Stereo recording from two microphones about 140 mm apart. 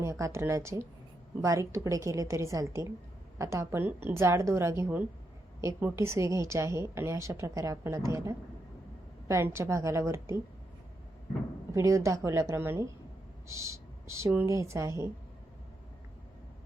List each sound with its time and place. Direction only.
0.0 s a woman's voice: 20° right (ahead or behind)
11.7 s a woman's voice: 20° right (ahead or behind)